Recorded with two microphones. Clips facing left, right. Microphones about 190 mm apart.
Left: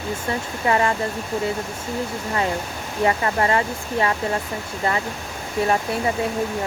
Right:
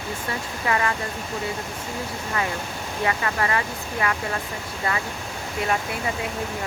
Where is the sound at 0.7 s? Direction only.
25° left (ahead or behind).